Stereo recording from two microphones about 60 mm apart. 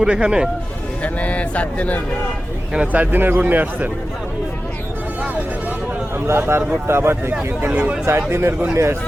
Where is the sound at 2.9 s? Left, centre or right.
Right.